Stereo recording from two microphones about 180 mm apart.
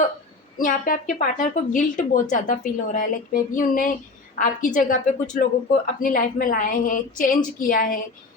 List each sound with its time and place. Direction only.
0.6 s a woman's voice: 50° left (ahead or behind)